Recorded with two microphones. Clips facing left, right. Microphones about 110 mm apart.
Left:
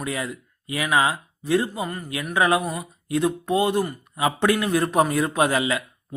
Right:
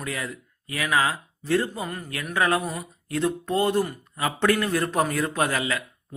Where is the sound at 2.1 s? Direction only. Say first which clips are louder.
Left 3 dB; 15° left (ahead or behind).